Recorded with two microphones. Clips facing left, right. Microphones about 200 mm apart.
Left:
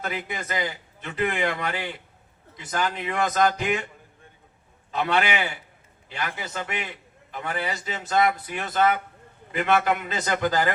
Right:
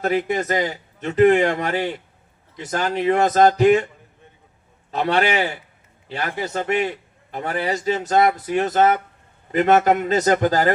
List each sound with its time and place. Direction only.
0.0 s a man's voice: 40° right (ahead or behind)
4.9 s a man's voice: 40° right (ahead or behind)